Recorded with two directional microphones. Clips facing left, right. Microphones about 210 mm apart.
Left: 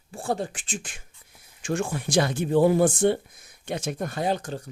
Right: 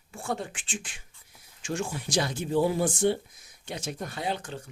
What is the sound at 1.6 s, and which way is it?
Speech, 55° left (ahead or behind).